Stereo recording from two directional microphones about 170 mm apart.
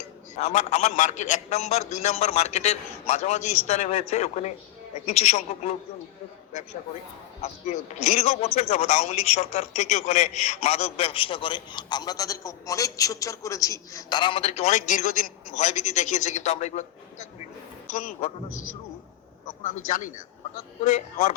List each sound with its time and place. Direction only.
0.3 s a man's voice: 45° left (ahead or behind)
7.4 s a man's voice: 40° left (ahead or behind)
19.6 s a man's voice: 50° left (ahead or behind)